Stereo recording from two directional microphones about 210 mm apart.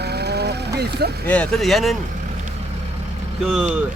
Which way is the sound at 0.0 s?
50° right (ahead or behind).